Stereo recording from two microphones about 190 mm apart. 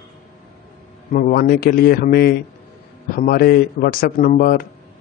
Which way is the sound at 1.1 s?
45° left (ahead or behind).